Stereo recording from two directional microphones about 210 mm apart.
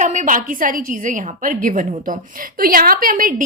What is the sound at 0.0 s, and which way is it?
A woman's voice, 35° right (ahead or behind).